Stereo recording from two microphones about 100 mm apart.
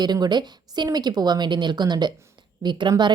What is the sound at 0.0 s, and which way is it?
A woman's voice, 45° right (ahead or behind).